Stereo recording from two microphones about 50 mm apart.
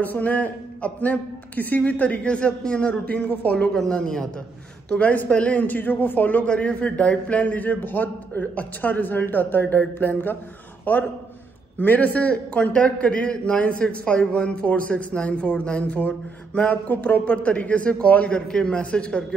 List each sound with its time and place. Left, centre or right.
0.0 s a man's voice: left
3.7 s speech: centre
4.8 s a man's voice: left
6.4 s a man's voice: left
16.5 s a man's voice: left